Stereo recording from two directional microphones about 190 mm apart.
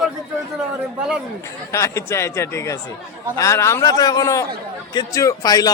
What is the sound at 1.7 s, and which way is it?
A man's voice, 15° left (ahead or behind).